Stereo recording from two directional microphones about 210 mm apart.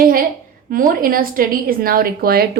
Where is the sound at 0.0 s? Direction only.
45° right (ahead or behind).